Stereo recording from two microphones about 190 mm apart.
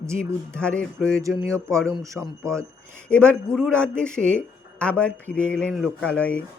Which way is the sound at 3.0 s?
5° left (ahead or behind).